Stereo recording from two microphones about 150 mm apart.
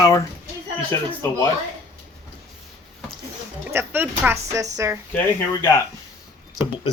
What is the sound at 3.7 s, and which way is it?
A woman's voice, 15° right (ahead or behind).